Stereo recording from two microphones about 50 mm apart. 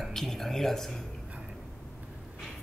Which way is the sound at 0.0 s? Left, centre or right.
Centre.